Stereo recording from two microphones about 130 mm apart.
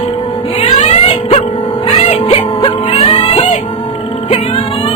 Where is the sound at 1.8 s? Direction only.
45° left (ahead or behind).